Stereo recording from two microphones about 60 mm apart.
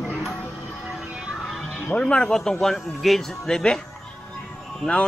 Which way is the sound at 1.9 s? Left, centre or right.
Centre.